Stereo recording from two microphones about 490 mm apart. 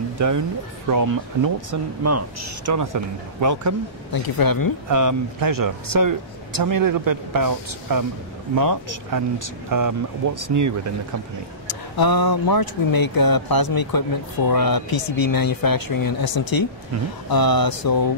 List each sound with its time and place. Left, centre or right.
0.2 s a man's voice: right
4.1 s speech: left
4.8 s a man's voice: right
11.6 s speech: left